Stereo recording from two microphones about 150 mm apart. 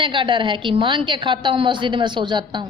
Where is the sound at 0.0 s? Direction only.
35° right (ahead or behind).